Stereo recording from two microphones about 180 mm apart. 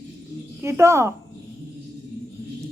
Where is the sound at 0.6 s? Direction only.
15° right (ahead or behind).